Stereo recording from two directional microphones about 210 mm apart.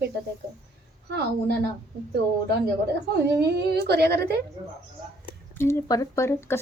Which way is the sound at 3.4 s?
50° right (ahead or behind).